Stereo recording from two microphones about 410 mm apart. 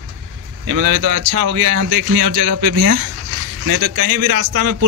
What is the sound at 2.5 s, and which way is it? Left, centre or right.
A man's voice, right.